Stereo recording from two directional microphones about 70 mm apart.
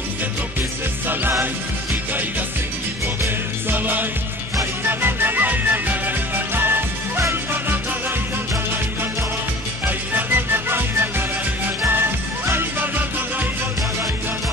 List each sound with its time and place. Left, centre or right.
3.7 s music: right
9.8 s music: right